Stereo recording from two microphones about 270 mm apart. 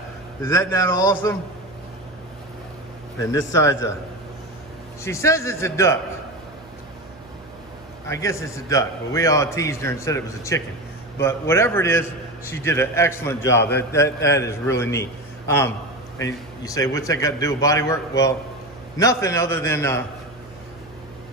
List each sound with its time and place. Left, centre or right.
0.4 s a man's voice: centre
3.5 s a man's voice: centre
5.0 s a man's voice: centre
8.1 s a man's voice: centre
13.6 s a man's voice: left
13.9 s a man's voice: centre
18.9 s a man's voice: centre